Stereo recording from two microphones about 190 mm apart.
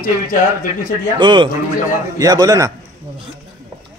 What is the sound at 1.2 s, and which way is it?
Speech, 25° right (ahead or behind).